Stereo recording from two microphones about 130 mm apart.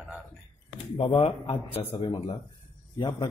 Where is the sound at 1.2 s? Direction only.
50° left (ahead or behind).